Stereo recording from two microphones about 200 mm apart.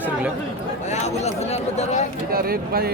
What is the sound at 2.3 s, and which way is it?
Speech, 50° right (ahead or behind).